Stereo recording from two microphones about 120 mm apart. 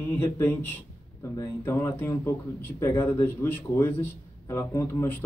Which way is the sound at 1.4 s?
20° left (ahead or behind).